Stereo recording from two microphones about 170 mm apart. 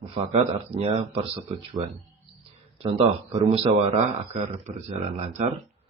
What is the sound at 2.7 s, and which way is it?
A man's voice, 30° right (ahead or behind).